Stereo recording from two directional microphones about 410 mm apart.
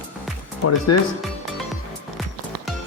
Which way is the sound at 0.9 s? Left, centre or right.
Left.